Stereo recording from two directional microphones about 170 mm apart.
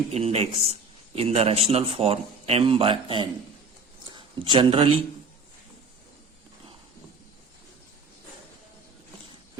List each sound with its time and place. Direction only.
0.1 s a man's voice: 35° right (ahead or behind)